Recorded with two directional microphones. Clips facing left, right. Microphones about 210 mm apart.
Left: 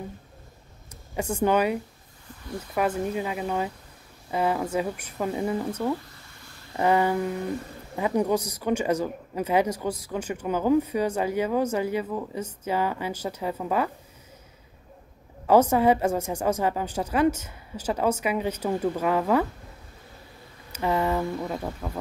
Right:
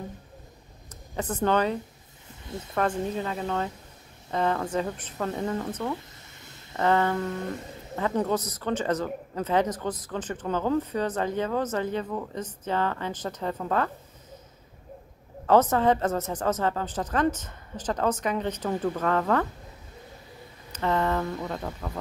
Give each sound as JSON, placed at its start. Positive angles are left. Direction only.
{"t": 1.1, "sound": "speech", "side_deg": 10}
{"t": 2.2, "sound": "a sound", "side_deg": -25}
{"t": 2.7, "sound": "speech", "side_deg": 10}
{"t": 15.4, "sound": "speech", "side_deg": 10}
{"t": 20.7, "sound": "speech", "side_deg": 10}